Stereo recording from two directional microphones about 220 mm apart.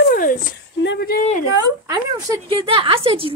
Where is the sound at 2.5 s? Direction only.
25° right (ahead or behind).